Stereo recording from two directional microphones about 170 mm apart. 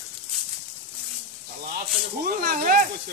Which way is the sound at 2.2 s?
60° right (ahead or behind).